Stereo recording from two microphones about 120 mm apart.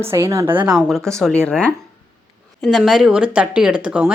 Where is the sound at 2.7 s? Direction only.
5° right (ahead or behind).